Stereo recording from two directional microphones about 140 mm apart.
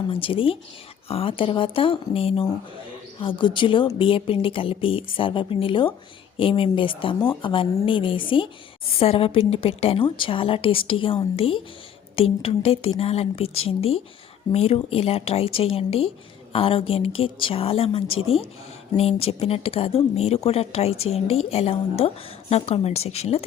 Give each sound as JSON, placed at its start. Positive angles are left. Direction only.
{"t": 0.1, "sound": "a woman's voice", "side_deg": 40}